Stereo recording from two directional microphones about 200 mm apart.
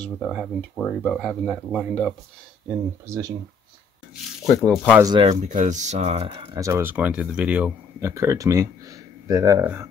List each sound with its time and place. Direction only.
0.0 s speech: 5° left (ahead or behind)
3.1 s speech: 15° right (ahead or behind)
4.6 s speech: 5° left (ahead or behind)
4.9 s speech: 20° right (ahead or behind)
5.3 s speech: 40° right (ahead or behind)
6.6 s speech: 10° right (ahead or behind)